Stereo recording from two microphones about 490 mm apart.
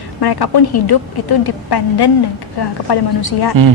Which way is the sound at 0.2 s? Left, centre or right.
Left.